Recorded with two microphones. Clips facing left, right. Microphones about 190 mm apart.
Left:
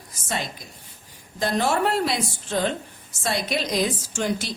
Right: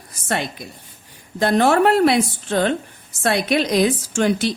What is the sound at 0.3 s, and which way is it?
A woman's voice, 60° right (ahead or behind).